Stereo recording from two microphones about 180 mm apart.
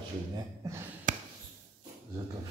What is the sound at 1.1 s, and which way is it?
Basketball bounce, 45° right (ahead or behind).